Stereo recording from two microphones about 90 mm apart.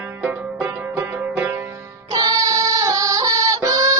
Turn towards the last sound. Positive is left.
turn(degrees=-40)  # may be behind; listen again after turning